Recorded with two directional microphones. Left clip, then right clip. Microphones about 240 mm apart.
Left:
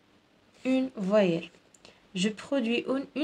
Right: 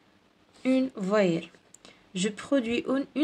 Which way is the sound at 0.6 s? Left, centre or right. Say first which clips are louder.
Right 2 dB; right.